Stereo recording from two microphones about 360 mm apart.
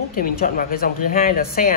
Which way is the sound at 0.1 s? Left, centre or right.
Left.